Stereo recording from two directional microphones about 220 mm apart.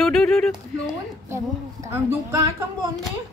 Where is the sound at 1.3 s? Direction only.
10° right (ahead or behind).